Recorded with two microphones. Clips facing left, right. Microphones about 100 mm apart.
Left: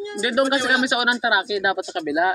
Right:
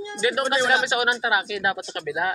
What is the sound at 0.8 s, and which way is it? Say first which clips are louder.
Speech: left 2 dB; 15° left (ahead or behind).